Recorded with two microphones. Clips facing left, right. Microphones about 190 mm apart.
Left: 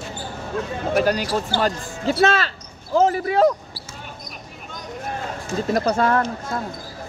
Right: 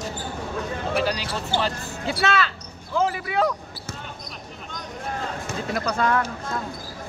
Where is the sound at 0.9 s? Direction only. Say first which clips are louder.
Left 7 dB; 50° left (ahead or behind).